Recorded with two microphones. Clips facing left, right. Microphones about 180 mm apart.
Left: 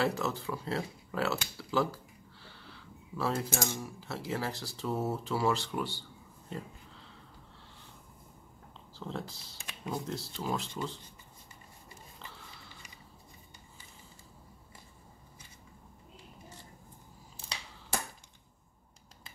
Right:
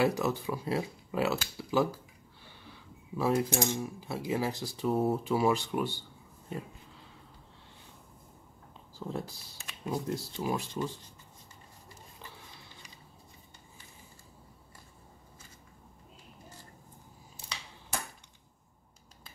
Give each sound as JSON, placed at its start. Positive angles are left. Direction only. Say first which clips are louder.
{"t": 0.0, "sound": "speech", "louder": "right 3 dB", "side_deg": -15}
{"t": 9.0, "sound": "speech", "louder": "right 2 dB", "side_deg": -10}